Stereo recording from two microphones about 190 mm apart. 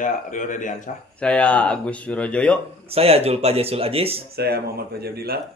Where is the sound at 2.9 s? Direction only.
30° right (ahead or behind).